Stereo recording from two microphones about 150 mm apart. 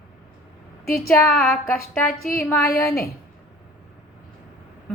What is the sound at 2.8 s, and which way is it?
Speech, 20° left (ahead or behind).